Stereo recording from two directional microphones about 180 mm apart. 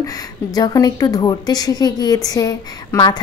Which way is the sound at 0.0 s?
20° left (ahead or behind).